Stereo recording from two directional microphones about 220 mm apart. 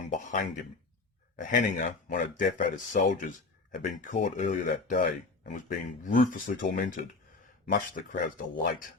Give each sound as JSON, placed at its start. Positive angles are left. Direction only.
{"t": 0.1, "sound": "speech", "side_deg": 35}